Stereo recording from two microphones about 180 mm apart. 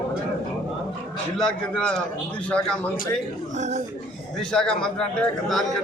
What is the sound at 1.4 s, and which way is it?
A man's voice, 5° left (ahead or behind).